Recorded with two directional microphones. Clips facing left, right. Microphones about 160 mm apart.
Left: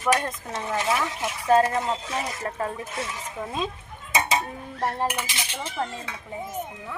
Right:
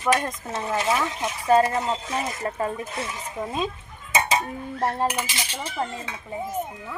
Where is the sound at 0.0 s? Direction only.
10° right (ahead or behind).